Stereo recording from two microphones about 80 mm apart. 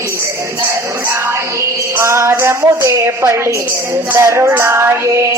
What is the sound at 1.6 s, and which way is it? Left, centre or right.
Music, right.